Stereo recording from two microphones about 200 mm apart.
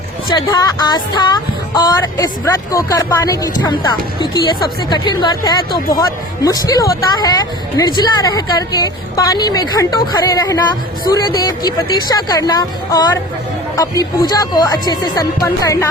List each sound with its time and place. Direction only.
0.3 s a woman's voice: 20° left (ahead or behind)